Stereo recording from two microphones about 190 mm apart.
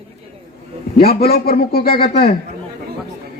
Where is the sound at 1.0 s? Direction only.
50° left (ahead or behind).